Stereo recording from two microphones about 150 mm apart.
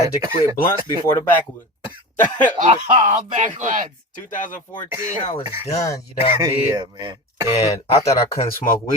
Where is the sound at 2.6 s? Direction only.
55° right (ahead or behind).